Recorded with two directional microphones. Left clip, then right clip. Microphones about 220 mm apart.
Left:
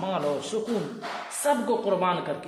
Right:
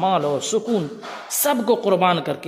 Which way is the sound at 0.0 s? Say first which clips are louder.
Right 8 dB; 45° right (ahead or behind).